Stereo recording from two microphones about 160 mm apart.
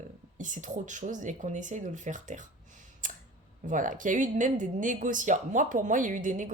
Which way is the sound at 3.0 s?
55° right (ahead or behind).